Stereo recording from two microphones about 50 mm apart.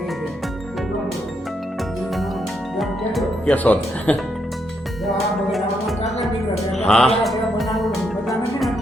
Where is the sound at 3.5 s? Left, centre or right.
Left.